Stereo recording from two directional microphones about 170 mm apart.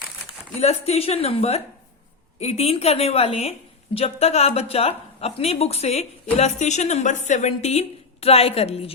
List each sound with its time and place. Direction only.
0.6 s a woman's voice: 40° left (ahead or behind)